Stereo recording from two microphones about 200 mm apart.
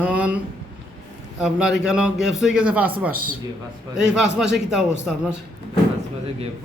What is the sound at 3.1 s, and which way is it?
Speech, 45° right (ahead or behind).